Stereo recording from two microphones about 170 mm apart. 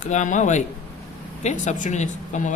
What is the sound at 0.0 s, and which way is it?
Speech, 45° left (ahead or behind).